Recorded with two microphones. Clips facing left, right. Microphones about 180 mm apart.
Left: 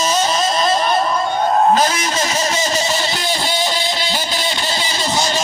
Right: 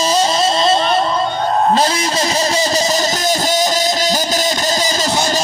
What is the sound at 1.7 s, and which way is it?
Vehicle, 30° right (ahead or behind).